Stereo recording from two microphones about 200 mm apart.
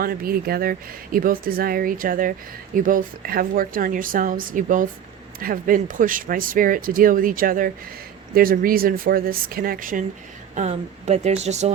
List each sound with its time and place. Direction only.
0.0 s speech: 45° right (ahead or behind)